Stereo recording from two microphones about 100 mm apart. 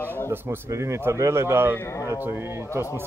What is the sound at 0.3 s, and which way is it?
Speech, 25° right (ahead or behind).